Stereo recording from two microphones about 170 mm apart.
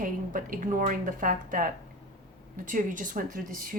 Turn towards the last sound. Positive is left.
turn(degrees=-55)  # may be behind; listen again after turning